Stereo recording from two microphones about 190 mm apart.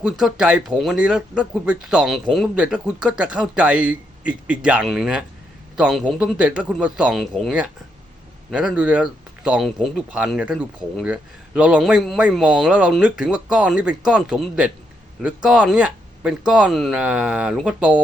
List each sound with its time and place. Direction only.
0.0 s speech: 5° right (ahead or behind)